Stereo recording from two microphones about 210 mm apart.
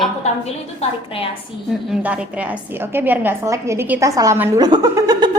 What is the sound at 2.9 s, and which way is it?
A woman's voice, 10° right (ahead or behind).